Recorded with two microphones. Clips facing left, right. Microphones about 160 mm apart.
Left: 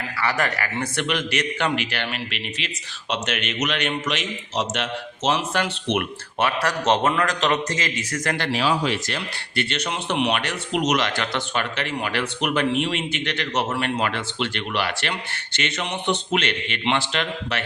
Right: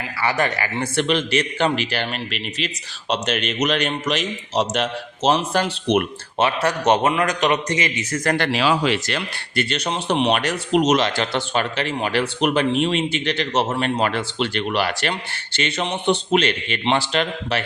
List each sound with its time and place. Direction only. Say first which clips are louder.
0.2 s speech: right 3 dB; 25° right (ahead or behind)
6.4 s a man's voice: right 3 dB; 25° right (ahead or behind)
8.4 s speech: right 1 dB; 80° right
9.6 s speech: right 3 dB; 35° right (ahead or behind)